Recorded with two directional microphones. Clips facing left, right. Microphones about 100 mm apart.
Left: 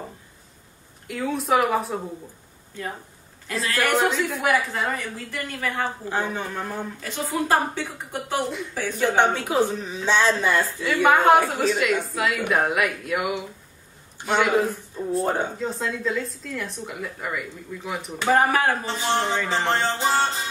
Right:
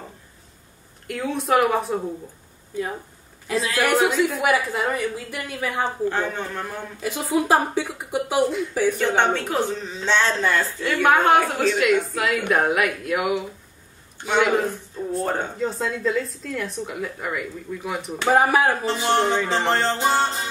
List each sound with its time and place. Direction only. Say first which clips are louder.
1.0 s speech: right 1 dB; centre (ahead or behind)
3.4 s speech: right 3 dB; centre (ahead or behind)
6.0 s speech: right 2 dB; 10° left (ahead or behind)
6.6 s speech: right 1 dB; 10° right (ahead or behind)
8.5 s speech: right 7 dB; centre (ahead or behind)
18.3 s speech: right 2 dB; 10° right (ahead or behind)